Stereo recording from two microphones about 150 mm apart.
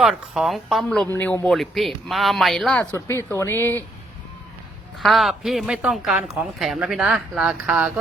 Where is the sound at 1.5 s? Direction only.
Centre (ahead or behind).